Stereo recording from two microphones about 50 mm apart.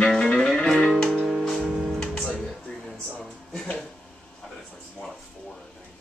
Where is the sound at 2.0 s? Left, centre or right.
Centre.